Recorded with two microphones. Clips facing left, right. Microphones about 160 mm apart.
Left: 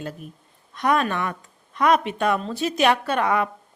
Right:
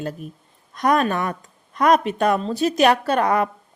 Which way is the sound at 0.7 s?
40° right (ahead or behind).